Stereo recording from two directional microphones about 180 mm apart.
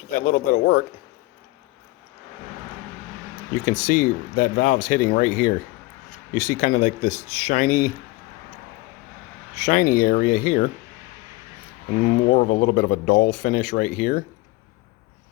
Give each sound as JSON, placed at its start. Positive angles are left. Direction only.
{"t": 0.1, "sound": "speech", "side_deg": 50}
{"t": 3.7, "sound": "speech", "side_deg": 50}
{"t": 9.6, "sound": "speech", "side_deg": 45}
{"t": 12.0, "sound": "speech", "side_deg": 45}